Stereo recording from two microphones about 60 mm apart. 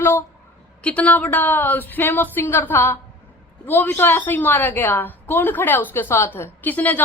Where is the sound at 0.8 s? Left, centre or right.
Left.